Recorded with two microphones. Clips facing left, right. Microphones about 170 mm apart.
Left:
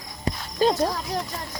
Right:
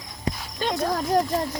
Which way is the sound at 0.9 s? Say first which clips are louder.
Right 7 dB; 45° right (ahead or behind).